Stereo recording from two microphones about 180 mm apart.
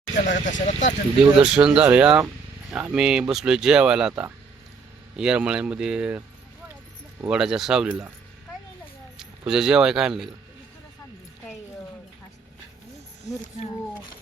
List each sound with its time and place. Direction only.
0.2 s speech: 45° left (ahead or behind)
1.2 s speech: 5° right (ahead or behind)
9.1 s speech: 5° right (ahead or behind)